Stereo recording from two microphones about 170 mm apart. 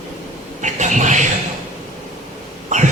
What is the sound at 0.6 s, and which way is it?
Vehicle, 45° right (ahead or behind).